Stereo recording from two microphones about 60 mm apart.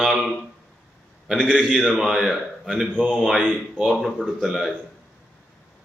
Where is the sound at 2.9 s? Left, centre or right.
Centre.